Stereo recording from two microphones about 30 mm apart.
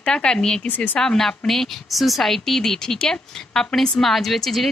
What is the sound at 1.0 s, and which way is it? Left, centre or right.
Speech, left.